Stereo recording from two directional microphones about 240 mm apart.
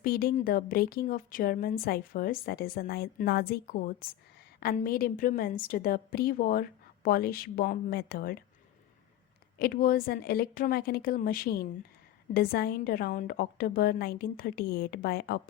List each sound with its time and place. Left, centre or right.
0.0 s speech: left
9.6 s speech: left